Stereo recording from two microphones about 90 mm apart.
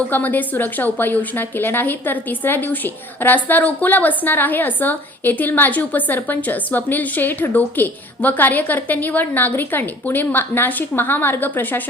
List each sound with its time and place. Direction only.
0.1 s a woman's voice: 20° left (ahead or behind)